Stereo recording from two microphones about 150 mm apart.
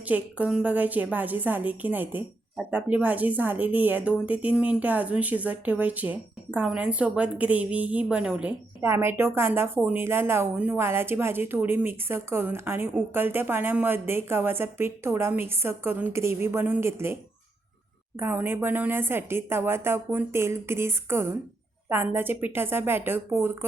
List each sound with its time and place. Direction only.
0.0 s a woman's voice: 10° right (ahead or behind)
18.2 s a woman's voice: 15° right (ahead or behind)